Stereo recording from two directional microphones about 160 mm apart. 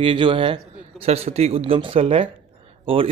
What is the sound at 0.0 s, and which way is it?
Speech, 30° right (ahead or behind).